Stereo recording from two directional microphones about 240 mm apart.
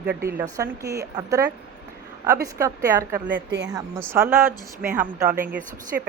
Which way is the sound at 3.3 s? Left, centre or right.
Right.